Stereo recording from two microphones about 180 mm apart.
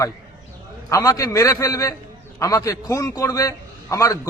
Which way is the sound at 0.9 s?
20° left (ahead or behind).